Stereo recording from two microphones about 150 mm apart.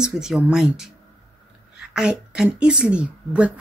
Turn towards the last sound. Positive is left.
turn(degrees=-10)  # may be behind; listen again after turning